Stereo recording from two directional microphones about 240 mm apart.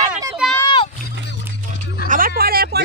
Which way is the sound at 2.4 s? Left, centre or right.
Right.